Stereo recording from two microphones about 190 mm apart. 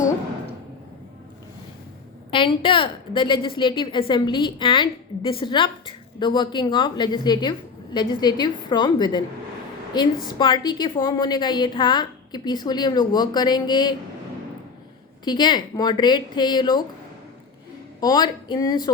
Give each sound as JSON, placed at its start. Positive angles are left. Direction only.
{"t": 2.3, "sound": "a woman's voice", "side_deg": 25}
{"t": 10.2, "sound": "a woman's voice", "side_deg": 25}
{"t": 15.2, "sound": "a woman's voice", "side_deg": 20}
{"t": 18.0, "sound": "a woman's voice", "side_deg": 20}